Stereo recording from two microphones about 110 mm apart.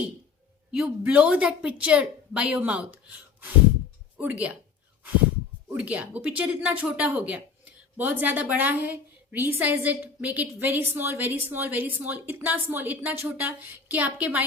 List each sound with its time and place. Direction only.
0.7 s speech: 5° right (ahead or behind)
4.2 s speech: 10° right (ahead or behind)
5.6 s speech: 10° right (ahead or behind)